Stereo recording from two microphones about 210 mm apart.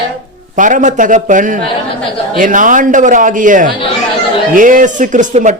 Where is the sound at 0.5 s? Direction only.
40° right (ahead or behind).